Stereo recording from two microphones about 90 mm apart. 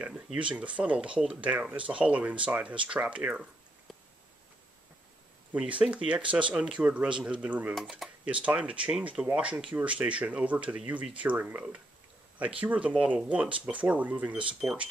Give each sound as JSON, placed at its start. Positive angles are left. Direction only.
{"t": 0.0, "sound": "speech", "side_deg": -15}
{"t": 5.5, "sound": "speech", "side_deg": -15}
{"t": 7.7, "sound": "speech", "side_deg": 0}
{"t": 8.3, "sound": "speech", "side_deg": -15}